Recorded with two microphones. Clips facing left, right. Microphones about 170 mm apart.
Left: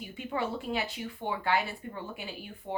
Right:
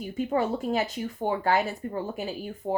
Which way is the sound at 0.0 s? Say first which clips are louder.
Right 7 dB; 45° right (ahead or behind).